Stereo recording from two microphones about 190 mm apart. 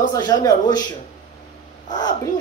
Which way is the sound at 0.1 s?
20° left (ahead or behind).